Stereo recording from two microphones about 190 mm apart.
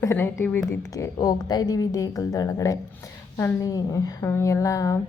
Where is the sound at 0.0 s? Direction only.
15° left (ahead or behind).